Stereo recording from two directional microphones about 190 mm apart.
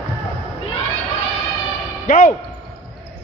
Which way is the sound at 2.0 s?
45° left (ahead or behind).